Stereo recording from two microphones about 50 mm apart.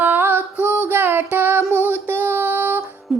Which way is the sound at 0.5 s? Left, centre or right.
Right.